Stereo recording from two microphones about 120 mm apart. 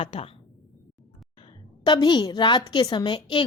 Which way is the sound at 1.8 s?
40° left (ahead or behind).